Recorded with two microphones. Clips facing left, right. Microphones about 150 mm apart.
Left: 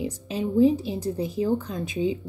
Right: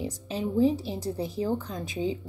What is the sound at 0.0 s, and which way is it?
A woman's voice, 15° left (ahead or behind).